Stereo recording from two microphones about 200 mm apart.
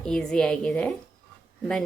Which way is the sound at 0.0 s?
5° left (ahead or behind).